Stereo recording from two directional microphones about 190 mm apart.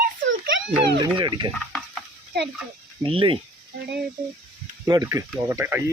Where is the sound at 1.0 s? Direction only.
25° right (ahead or behind).